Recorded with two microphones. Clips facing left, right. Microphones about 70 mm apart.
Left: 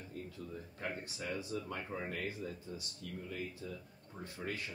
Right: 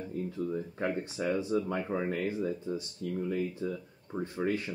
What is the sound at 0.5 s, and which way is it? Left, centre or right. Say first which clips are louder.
Speech: right 10 dB; right.